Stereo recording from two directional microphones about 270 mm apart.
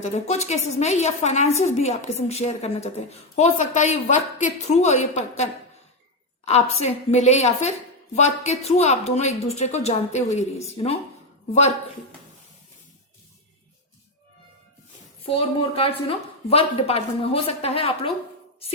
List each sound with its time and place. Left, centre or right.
0.0 s a woman's voice: left
6.4 s a woman's voice: left
15.3 s a woman's voice: left